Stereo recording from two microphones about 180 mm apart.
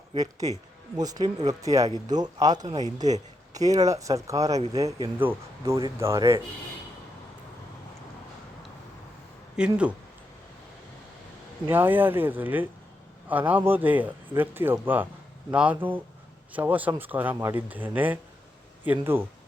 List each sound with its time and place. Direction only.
0.2 s speech: 20° right (ahead or behind)
9.6 s speech: 5° right (ahead or behind)
11.6 s speech: 10° right (ahead or behind)